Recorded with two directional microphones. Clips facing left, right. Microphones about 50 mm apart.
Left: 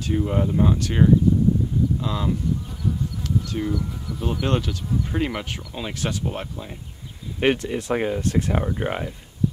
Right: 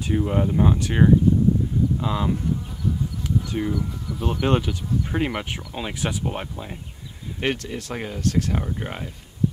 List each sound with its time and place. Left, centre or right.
0.0 s speech: centre
7.3 s speech: centre